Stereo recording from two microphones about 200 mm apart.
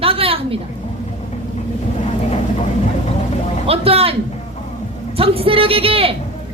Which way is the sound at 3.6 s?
30° right (ahead or behind).